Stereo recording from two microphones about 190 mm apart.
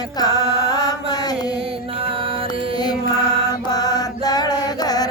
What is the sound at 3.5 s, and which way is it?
Mantra, 20° left (ahead or behind).